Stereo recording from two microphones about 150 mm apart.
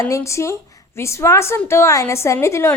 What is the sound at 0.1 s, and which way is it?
A woman's voice, 20° left (ahead or behind).